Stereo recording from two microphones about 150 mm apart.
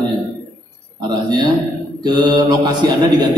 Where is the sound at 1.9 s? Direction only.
30° right (ahead or behind).